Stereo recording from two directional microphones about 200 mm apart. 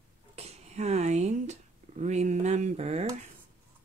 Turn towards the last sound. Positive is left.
turn(degrees=-35)  # may be behind; listen again after turning